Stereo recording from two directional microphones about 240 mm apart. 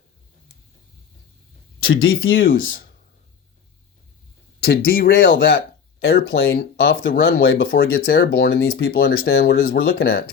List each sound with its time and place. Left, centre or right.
1.8 s speech: left
4.6 s speech: left